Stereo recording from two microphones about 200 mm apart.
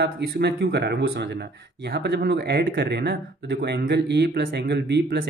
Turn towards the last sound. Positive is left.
turn(degrees=-55)  # may be behind; listen again after turning